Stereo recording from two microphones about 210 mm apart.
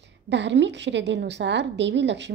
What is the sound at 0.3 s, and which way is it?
A woman's voice, 55° right (ahead or behind).